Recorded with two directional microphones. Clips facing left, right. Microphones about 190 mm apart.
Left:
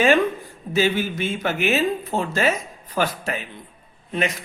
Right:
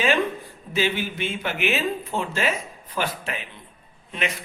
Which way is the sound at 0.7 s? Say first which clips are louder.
Left 4 dB; 45° left (ahead or behind).